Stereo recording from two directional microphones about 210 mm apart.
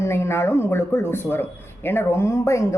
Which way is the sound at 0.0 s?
10° left (ahead or behind).